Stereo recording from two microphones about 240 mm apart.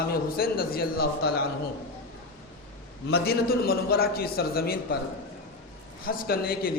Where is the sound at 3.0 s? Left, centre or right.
Left.